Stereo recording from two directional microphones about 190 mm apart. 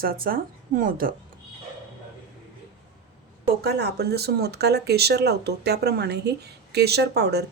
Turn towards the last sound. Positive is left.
turn(degrees=-60)  # may be behind; listen again after turning